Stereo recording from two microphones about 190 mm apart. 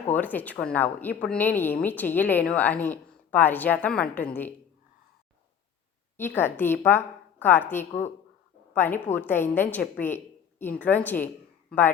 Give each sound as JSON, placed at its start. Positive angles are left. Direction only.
{"t": 0.1, "sound": "a woman's voice", "side_deg": 10}
{"t": 6.1, "sound": "a woman's voice", "side_deg": 10}